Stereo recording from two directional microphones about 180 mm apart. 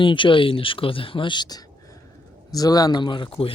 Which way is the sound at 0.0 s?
25° left (ahead or behind).